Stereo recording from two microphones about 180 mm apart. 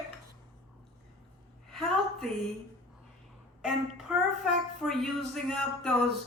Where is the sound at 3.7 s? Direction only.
Centre (ahead or behind).